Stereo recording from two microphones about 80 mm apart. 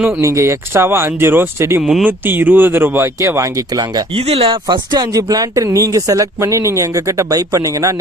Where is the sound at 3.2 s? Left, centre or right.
Right.